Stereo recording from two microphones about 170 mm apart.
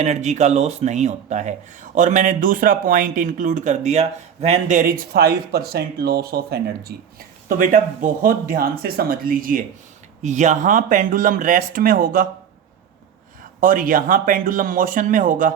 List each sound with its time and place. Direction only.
0.0 s speech: 40° right (ahead or behind)
4.8 s speech: 65° right (ahead or behind)
7.4 s speech: 55° right (ahead or behind)
10.2 s speech: 45° right (ahead or behind)
13.6 s speech: 55° right (ahead or behind)